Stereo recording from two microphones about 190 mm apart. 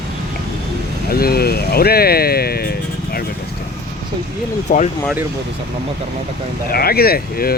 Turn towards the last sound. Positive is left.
turn(degrees=50)  # may be behind; listen again after turning